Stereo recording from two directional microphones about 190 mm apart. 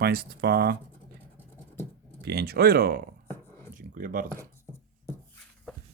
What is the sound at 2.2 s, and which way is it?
Speech, 55° right (ahead or behind).